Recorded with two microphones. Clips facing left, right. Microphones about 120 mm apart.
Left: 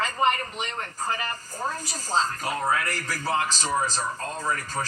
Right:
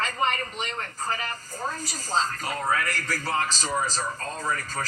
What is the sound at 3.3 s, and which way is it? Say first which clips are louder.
Speech: left 3 dB; 20° left (ahead or behind).